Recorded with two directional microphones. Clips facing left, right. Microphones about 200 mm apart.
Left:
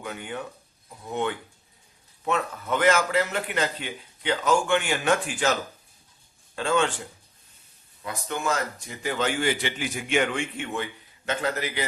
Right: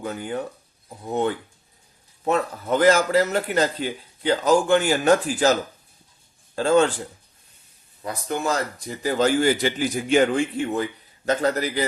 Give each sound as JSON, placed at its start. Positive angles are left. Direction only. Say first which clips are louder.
{"t": 0.0, "sound": "a man's voice", "louder": "right 6 dB", "side_deg": -35}
{"t": 6.6, "sound": "a man's voice", "louder": "right 6 dB", "side_deg": -40}
{"t": 8.0, "sound": "a man's voice", "louder": "right 3 dB", "side_deg": -35}